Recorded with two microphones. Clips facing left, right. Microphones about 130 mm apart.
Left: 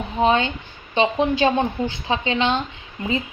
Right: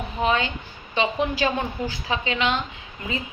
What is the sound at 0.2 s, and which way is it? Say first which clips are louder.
A woman's voice: left 5 dB; 30° left (ahead or behind).